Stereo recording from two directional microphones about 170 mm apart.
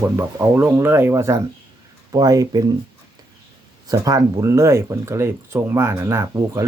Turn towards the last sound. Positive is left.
turn(degrees=-15)  # may be behind; listen again after turning